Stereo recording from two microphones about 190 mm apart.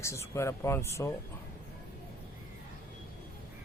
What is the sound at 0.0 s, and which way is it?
Speech, 15° left (ahead or behind).